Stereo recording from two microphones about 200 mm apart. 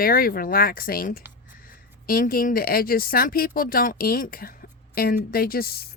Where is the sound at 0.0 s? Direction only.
45° left (ahead or behind).